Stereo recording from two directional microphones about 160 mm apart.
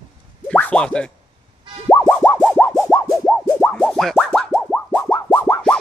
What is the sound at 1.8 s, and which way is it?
Music, 10° left (ahead or behind).